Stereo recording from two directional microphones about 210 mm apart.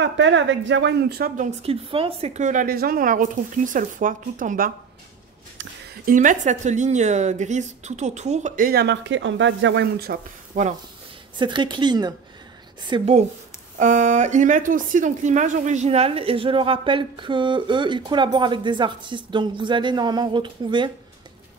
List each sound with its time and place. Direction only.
0.0 s a woman's voice: 60° right (ahead or behind); by 4.7 s 40° right (ahead or behind)
5.6 s a sound: 60° right (ahead or behind)
6.0 s a woman's voice: 40° right (ahead or behind)
11.3 s speech: 20° right (ahead or behind)